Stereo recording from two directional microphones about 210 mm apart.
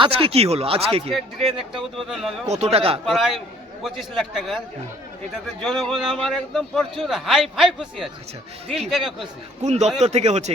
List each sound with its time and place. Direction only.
0.0 s speech: 25° right (ahead or behind)
1.1 s a man's voice: centre (ahead or behind)
2.5 s speech: 30° right (ahead or behind)
3.1 s a man's voice: centre (ahead or behind)
9.2 s a man's voice: 30° right (ahead or behind)